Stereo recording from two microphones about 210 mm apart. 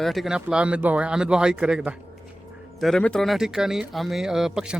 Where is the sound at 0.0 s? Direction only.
Centre (ahead or behind).